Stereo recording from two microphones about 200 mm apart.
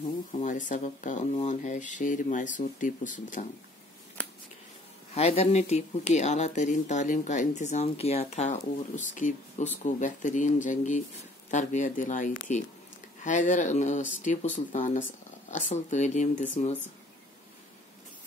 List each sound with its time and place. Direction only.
0.3 s speech: 40° left (ahead or behind)
5.1 s speech: 30° left (ahead or behind)